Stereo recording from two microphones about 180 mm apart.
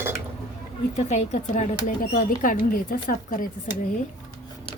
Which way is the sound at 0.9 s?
40° left (ahead or behind).